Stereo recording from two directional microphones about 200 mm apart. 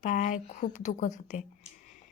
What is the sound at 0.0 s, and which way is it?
A woman's voice, 40° left (ahead or behind).